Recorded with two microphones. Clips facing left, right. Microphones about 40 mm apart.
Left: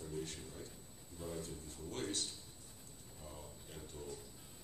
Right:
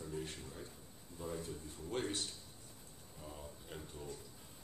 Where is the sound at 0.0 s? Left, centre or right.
Centre.